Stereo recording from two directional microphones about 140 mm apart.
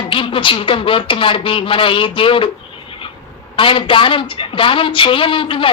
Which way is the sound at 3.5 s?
35° left (ahead or behind).